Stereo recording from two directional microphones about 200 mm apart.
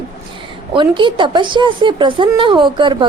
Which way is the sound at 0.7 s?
25° right (ahead or behind).